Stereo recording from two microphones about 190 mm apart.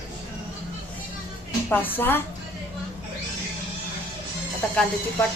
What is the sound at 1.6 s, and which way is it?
Speech, 10° left (ahead or behind).